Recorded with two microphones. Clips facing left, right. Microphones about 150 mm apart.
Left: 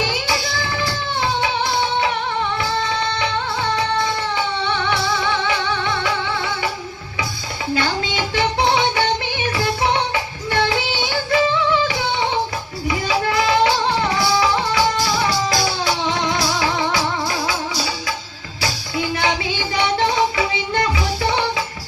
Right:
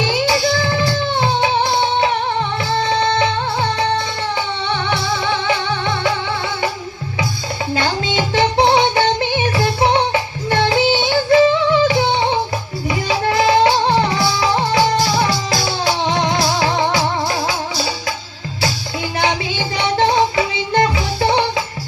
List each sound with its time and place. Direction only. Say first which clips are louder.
0.0 s music: right 6 dB; 30° right (ahead or behind)
4.7 s music: right 3 dB; 30° right (ahead or behind)
7.8 s music: right 3 dB; 30° right (ahead or behind)
13.1 s music: right 4 dB; 30° right (ahead or behind)
15.4 s music: right 1 dB; 30° right (ahead or behind)
19.2 s music: right 2 dB; 30° right (ahead or behind)